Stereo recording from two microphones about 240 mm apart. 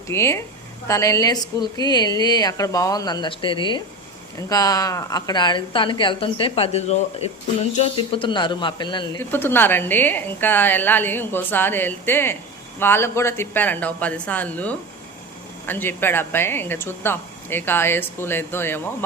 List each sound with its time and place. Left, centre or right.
0.1 s a woman's voice: centre
9.3 s speech: centre